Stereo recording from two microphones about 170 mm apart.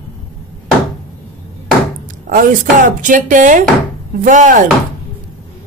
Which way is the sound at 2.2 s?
55° right (ahead or behind).